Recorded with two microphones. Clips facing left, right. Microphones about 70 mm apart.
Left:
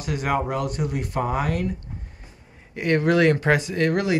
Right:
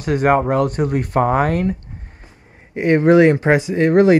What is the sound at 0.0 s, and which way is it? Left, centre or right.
Speech, right.